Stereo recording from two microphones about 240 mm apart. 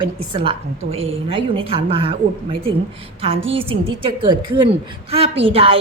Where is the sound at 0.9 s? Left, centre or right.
Right.